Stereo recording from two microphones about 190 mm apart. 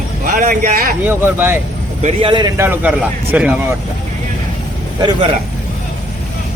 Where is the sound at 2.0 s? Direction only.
30° right (ahead or behind).